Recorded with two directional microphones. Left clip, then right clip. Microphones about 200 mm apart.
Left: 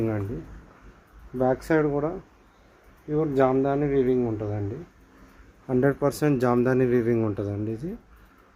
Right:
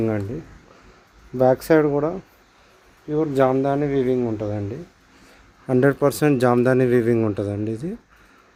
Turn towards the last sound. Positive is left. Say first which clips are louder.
# right 5 dB
turn(degrees=-35)  # may be behind; listen again after turning